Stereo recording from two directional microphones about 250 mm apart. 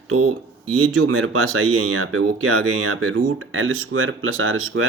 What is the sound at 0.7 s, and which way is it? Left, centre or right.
Speech, right.